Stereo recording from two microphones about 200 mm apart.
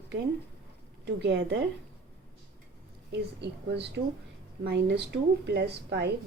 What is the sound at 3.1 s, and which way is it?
A woman's voice, 60° right (ahead or behind).